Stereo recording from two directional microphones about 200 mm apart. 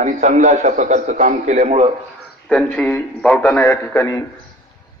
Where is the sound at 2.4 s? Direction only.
5° left (ahead or behind).